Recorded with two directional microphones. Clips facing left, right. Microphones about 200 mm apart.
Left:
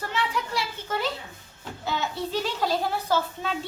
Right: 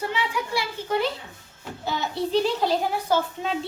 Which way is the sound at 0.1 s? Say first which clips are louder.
Right 2 dB; 15° right (ahead or behind).